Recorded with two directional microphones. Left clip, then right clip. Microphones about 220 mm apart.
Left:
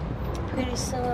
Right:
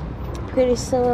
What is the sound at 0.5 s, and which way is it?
Speech, 15° right (ahead or behind).